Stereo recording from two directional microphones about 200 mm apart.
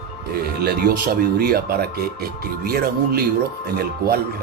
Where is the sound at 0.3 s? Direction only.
50° right (ahead or behind).